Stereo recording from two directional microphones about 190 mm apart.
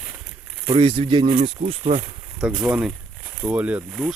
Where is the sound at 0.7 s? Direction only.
30° right (ahead or behind).